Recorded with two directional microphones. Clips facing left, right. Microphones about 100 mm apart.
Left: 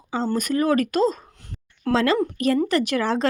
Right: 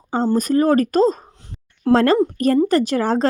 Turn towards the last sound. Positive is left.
turn(degrees=-40)  # may be behind; listen again after turning